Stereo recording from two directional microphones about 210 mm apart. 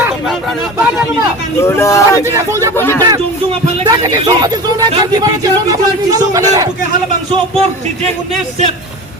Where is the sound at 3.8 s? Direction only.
20° right (ahead or behind).